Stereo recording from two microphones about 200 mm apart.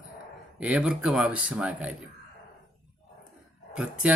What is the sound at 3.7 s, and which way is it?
Speech, 5° right (ahead or behind).